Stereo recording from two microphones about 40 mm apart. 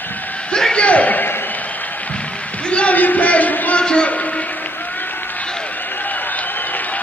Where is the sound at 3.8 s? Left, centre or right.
Left.